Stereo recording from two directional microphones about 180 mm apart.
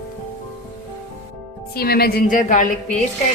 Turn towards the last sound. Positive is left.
turn(degrees=45)  # may be behind; listen again after turning